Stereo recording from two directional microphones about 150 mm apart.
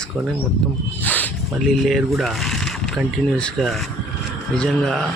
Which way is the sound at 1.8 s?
Centre (ahead or behind).